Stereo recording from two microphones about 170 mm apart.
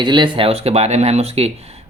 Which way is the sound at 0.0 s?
25° right (ahead or behind).